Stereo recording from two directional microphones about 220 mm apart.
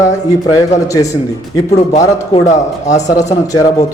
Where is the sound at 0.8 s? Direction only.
15° left (ahead or behind).